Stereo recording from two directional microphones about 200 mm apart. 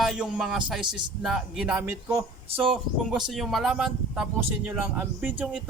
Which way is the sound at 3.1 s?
Centre (ahead or behind).